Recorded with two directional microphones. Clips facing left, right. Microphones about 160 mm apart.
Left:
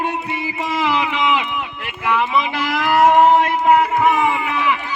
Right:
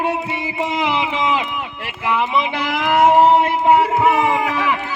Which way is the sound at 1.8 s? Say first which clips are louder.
Even; 25° right (ahead or behind).